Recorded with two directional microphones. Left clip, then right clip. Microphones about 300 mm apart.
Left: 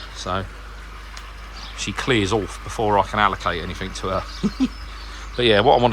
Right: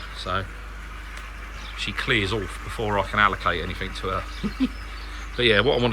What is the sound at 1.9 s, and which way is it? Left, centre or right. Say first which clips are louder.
Speech: left 3 dB; centre.